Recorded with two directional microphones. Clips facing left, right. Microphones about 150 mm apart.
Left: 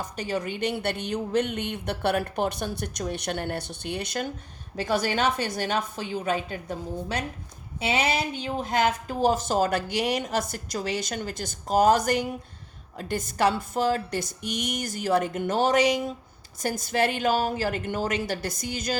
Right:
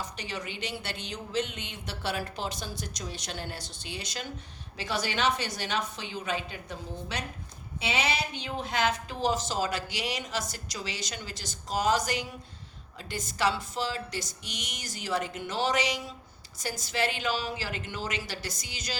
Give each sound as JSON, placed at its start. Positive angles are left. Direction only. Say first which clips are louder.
{"t": 0.0, "sound": "speech", "louder": "left 7 dB", "side_deg": 50}